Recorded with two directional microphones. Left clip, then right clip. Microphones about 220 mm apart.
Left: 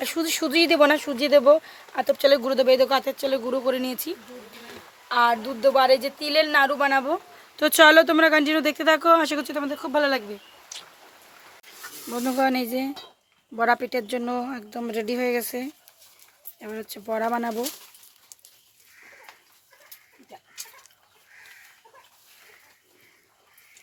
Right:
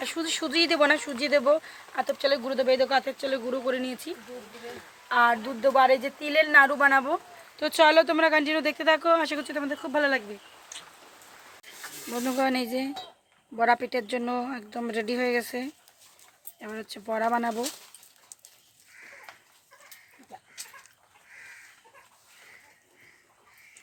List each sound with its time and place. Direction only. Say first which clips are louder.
0.0 s a woman's voice: left 4 dB; 20° left (ahead or behind)
7.5 s speech: left 5 dB; 30° left (ahead or behind)
11.6 s a woman's voice: left 1 dB; 15° left (ahead or behind)